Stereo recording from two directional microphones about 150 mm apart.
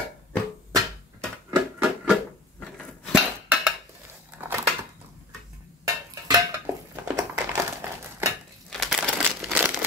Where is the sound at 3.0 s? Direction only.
5° right (ahead or behind).